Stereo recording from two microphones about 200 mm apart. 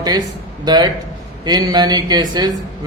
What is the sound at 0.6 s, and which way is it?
A man's voice, 20° right (ahead or behind).